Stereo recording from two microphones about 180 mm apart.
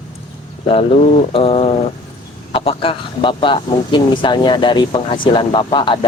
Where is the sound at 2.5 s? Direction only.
30° left (ahead or behind).